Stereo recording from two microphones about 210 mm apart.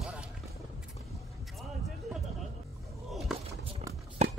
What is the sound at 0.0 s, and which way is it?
Music, 5° right (ahead or behind).